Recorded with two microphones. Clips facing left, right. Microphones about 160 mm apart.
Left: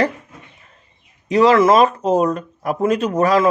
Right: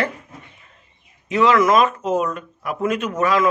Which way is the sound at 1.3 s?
35° left (ahead or behind).